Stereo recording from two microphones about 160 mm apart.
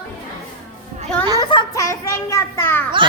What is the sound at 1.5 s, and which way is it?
A child's voice, 25° left (ahead or behind).